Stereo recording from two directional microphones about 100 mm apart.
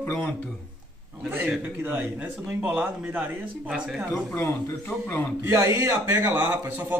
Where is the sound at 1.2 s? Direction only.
20° right (ahead or behind).